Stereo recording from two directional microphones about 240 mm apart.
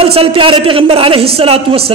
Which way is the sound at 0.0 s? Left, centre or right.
Right.